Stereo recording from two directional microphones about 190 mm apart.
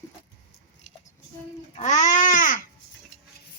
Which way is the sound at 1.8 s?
40° left (ahead or behind).